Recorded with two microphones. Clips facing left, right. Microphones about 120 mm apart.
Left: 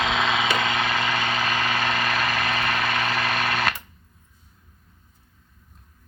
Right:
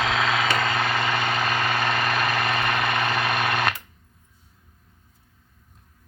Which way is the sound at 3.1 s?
10° right (ahead or behind).